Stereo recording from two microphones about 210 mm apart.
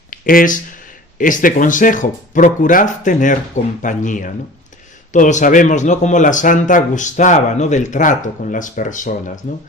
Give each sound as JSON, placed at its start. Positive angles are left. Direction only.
{"t": 0.1, "sound": "speech", "side_deg": 40}